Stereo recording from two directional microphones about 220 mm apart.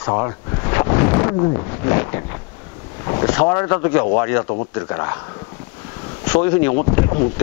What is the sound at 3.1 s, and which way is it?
Speech, 25° left (ahead or behind).